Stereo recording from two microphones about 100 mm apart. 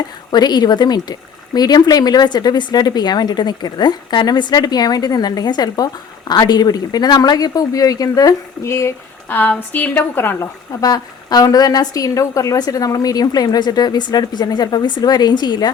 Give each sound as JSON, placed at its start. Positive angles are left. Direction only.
{"t": 0.3, "sound": "speech", "side_deg": 45}
{"t": 9.3, "sound": "a woman's voice", "side_deg": 20}
{"t": 10.8, "sound": "speech", "side_deg": 40}